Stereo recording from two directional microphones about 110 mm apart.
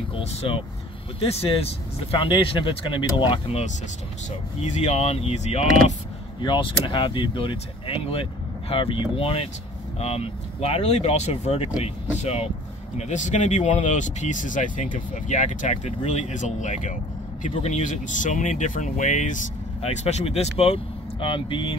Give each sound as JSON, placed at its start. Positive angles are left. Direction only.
{"t": 0.1, "sound": "speech", "side_deg": 65}
{"t": 4.6, "sound": "speech", "side_deg": 85}
{"t": 6.4, "sound": "speech", "side_deg": 45}
{"t": 9.9, "sound": "speech", "side_deg": 70}
{"t": 12.9, "sound": "speech", "side_deg": 90}